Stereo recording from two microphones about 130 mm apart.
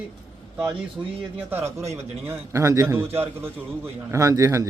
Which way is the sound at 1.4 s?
15° right (ahead or behind).